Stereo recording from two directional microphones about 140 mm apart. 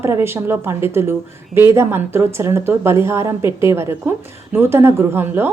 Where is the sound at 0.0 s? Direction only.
20° right (ahead or behind).